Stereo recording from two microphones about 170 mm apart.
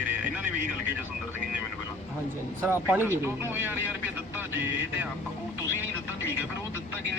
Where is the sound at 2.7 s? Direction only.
10° right (ahead or behind).